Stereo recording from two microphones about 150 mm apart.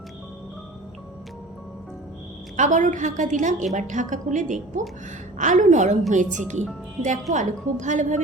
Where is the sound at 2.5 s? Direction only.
55° right (ahead or behind).